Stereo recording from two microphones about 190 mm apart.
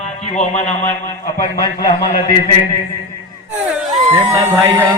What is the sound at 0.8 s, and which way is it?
A man's voice, 10° left (ahead or behind).